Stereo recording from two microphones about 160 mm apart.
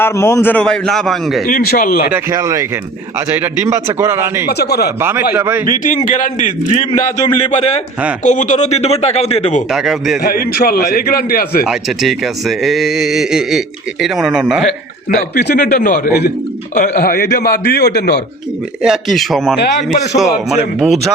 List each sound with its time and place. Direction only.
0.0 s speech: 15° left (ahead or behind); by 1.4 s centre (ahead or behind)
1.5 s a man's voice: 65° left (ahead or behind)
2.1 s a man's voice: 20° right (ahead or behind)
4.4 s a man's voice: 90° left
4.9 s a man's voice: 15° right (ahead or behind)
6.1 s a man's voice: 55° left (ahead or behind)
9.7 s speech: centre (ahead or behind)
10.2 s a man's voice: 65° left (ahead or behind)
11.7 s speech: centre (ahead or behind)
15.4 s a man's voice: 90° left
15.6 s a man's voice: 55° left (ahead or behind); by 18.2 s 90° left
18.8 s speech: centre (ahead or behind)